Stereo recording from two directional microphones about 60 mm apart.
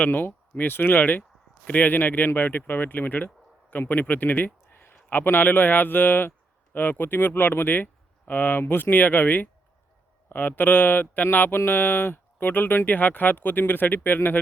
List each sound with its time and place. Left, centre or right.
0.0 s speech: left